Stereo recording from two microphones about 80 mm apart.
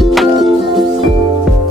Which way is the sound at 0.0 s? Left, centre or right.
Centre.